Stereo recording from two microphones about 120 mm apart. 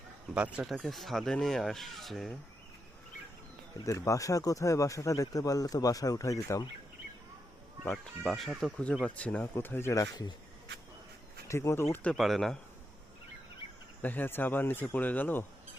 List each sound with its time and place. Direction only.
0.3 s speech: 10° right (ahead or behind)
0.7 s speech: centre (ahead or behind)
3.8 s speech: 25° left (ahead or behind)
8.2 s speech: centre (ahead or behind)
9.0 s speech: 10° left (ahead or behind); by 10.3 s 35° left (ahead or behind)
11.4 s speech: 25° left (ahead or behind)
12.1 s speech: centre (ahead or behind)
14.0 s speech: 15° left (ahead or behind)